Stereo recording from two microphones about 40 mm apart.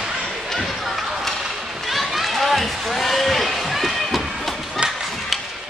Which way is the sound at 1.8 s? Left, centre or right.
Centre.